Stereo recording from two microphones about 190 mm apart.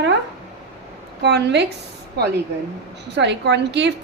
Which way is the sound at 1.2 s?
65° right (ahead or behind).